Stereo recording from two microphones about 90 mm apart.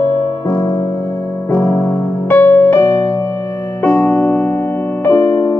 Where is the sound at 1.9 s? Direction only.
20° left (ahead or behind).